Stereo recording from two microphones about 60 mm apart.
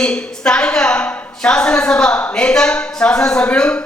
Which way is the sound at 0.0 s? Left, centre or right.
Centre.